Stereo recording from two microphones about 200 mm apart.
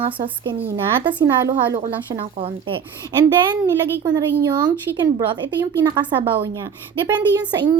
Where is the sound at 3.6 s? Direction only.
20° right (ahead or behind).